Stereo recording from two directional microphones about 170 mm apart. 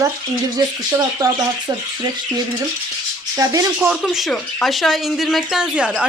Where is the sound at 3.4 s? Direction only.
20° right (ahead or behind).